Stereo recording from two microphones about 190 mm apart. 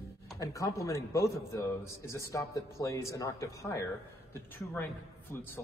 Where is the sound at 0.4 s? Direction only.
15° left (ahead or behind).